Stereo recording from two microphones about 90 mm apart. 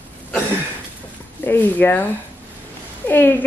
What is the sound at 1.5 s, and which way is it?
Speech, 20° left (ahead or behind).